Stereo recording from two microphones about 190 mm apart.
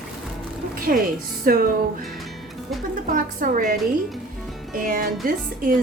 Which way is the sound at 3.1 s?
45° right (ahead or behind).